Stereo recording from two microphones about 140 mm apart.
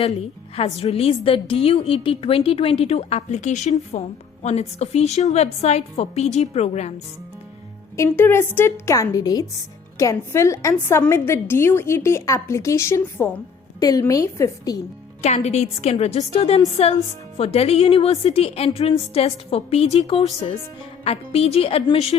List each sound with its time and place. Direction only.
0.0 s a woman's voice: 45° left (ahead or behind)
7.9 s a woman's voice: 20° left (ahead or behind)
13.7 s a woman's voice: 25° left (ahead or behind)
15.2 s a woman's voice: 50° left (ahead or behind)